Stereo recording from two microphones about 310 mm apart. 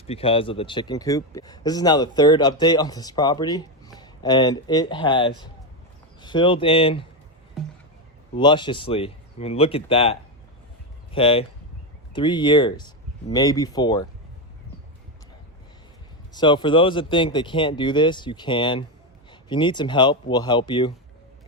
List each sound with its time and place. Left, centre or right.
0.1 s speech: centre
8.4 s speech: centre
16.3 s speech: centre